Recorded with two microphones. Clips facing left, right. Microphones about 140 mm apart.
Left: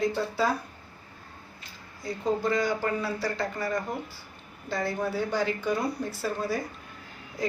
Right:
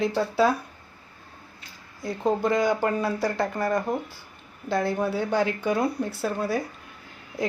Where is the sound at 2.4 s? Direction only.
55° right (ahead or behind).